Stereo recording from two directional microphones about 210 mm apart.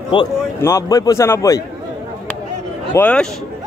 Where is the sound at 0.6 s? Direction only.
15° left (ahead or behind).